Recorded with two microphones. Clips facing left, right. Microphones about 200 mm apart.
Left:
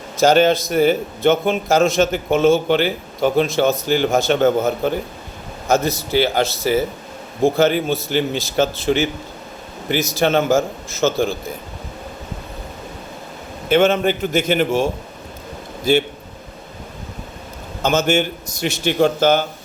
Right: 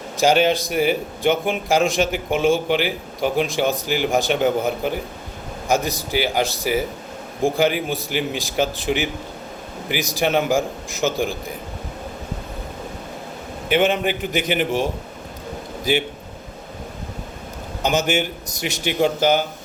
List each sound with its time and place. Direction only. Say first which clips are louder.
0.2 s a man's voice: left 3 dB; 15° right (ahead or behind)
13.7 s a man's voice: left 4 dB; 15° right (ahead or behind)
17.8 s a man's voice: left 3 dB; 15° right (ahead or behind)